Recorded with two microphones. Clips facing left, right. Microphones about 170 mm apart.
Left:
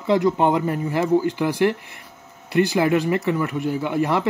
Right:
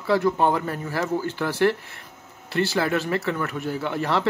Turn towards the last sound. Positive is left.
turn(degrees=15)  # may be behind; listen again after turning